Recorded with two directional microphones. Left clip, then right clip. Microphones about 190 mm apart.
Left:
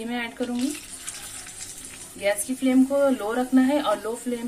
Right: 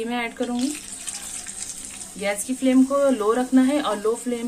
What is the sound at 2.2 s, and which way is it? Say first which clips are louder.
Speech: left 1 dB; 20° right (ahead or behind).